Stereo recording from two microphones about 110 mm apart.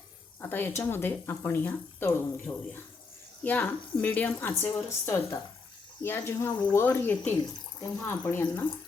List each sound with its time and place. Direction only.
0.4 s speech: 20° left (ahead or behind)
2.5 s speech: 35° left (ahead or behind)
3.4 s speech: 15° left (ahead or behind)